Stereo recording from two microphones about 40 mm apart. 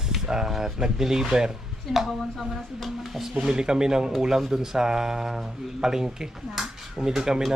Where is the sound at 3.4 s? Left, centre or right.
Centre.